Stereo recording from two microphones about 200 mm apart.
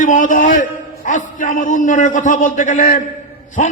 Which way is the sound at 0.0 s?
40° left (ahead or behind).